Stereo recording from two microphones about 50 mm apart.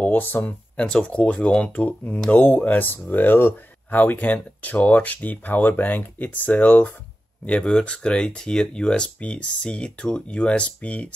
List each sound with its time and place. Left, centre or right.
0.0 s speech: left
0.8 s speech: centre; by 2.1 s left
2.3 s speech: left
4.0 s speech: left